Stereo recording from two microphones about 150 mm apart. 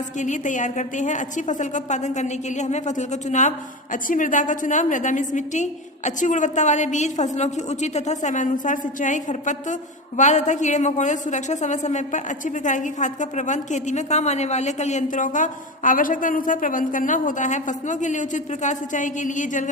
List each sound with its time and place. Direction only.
0.2 s a woman's voice: 55° left (ahead or behind)